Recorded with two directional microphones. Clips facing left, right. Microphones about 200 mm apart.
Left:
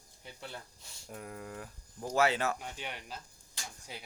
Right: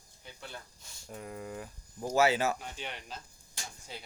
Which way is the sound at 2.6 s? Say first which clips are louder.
Even; 10° left (ahead or behind).